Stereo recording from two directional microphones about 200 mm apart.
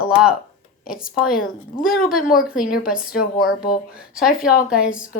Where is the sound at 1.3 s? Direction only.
45° left (ahead or behind).